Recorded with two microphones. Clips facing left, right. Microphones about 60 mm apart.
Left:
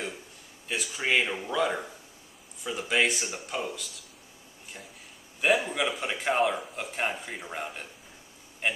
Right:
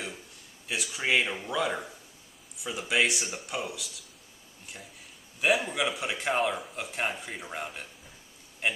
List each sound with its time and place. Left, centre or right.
0.7 s speech: centre
5.4 s a man's voice: centre